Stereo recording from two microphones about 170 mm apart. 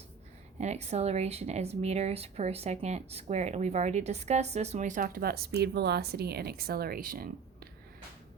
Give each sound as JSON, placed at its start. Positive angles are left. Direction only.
{"t": 0.6, "sound": "speech", "side_deg": -40}